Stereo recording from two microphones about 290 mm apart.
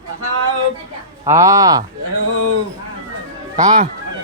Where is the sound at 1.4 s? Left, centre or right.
Centre.